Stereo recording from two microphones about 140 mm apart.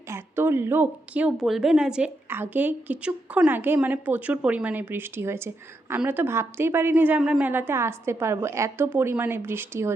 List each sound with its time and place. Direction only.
0.1 s a woman's voice: 15° right (ahead or behind)